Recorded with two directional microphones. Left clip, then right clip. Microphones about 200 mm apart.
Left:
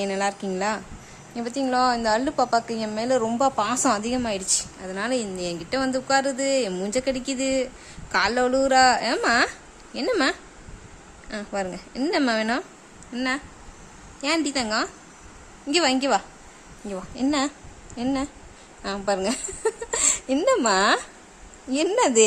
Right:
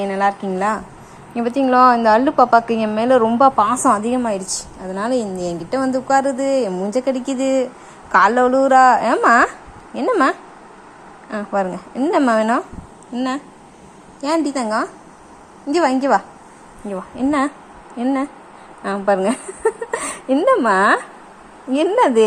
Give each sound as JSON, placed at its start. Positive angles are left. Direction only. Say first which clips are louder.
{"t": 0.0, "sound": "speech", "louder": "right 7 dB", "side_deg": 15}
{"t": 1.4, "sound": "a woman's voice", "louder": "right 10 dB", "side_deg": 0}
{"t": 4.4, "sound": "a woman's voice", "louder": "right 1 dB", "side_deg": 0}
{"t": 5.8, "sound": "speech", "louder": "right 6 dB", "side_deg": 20}
{"t": 6.4, "sound": "speech", "louder": "right 5 dB", "side_deg": 5}
{"t": 9.0, "sound": "a woman's voice", "louder": "right 8 dB", "side_deg": 20}
{"t": 14.6, "sound": "speech", "louder": "right 5 dB", "side_deg": 20}
{"t": 17.2, "sound": "a woman's voice", "louder": "right 6 dB", "side_deg": 15}